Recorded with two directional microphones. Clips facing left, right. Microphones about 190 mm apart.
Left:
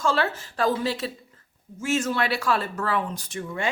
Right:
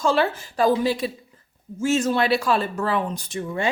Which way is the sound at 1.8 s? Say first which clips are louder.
Right 4 dB; 30° right (ahead or behind).